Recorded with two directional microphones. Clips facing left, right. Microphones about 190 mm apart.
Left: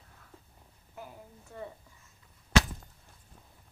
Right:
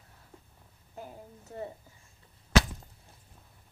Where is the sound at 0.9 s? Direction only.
30° right (ahead or behind).